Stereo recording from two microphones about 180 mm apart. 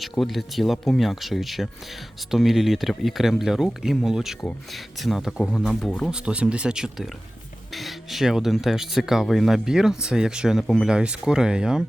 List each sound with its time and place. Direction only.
0.0 s speech: centre (ahead or behind)